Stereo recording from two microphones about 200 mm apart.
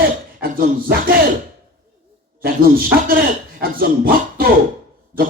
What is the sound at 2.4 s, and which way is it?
A man's voice, 45° right (ahead or behind).